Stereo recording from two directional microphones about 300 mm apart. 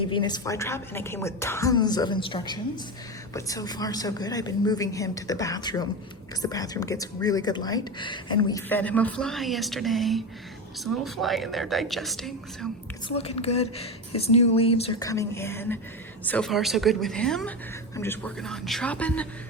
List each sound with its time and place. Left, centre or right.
0.1 s a woman's voice: centre
13.1 s a woman's voice: centre